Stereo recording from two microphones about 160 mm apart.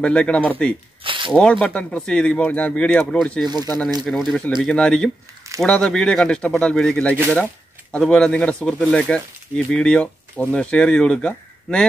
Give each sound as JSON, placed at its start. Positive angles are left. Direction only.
{"t": 0.0, "sound": "speech", "side_deg": 5}
{"t": 1.0, "sound": "tearing", "side_deg": -30}
{"t": 1.3, "sound": "speech", "side_deg": 5}
{"t": 3.4, "sound": "speech", "side_deg": -25}
{"t": 4.0, "sound": "speech", "side_deg": 0}